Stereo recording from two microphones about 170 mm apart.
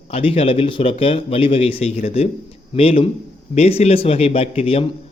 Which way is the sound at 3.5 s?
35° left (ahead or behind).